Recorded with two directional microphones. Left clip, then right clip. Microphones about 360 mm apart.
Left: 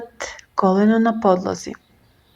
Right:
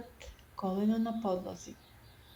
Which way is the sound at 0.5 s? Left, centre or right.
Right.